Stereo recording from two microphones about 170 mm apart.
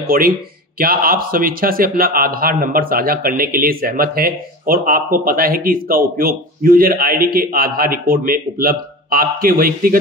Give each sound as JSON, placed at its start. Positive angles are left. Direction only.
{"t": 0.1, "sound": "speech", "side_deg": -55}